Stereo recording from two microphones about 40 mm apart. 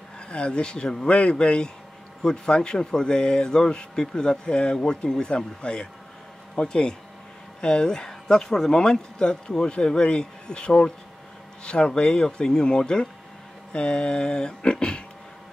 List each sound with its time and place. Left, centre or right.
0.3 s speech: left